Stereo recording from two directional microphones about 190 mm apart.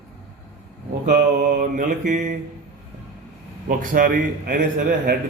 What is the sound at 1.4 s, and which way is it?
Speech, 45° right (ahead or behind).